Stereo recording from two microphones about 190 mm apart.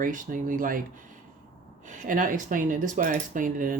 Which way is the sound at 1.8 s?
45° right (ahead or behind).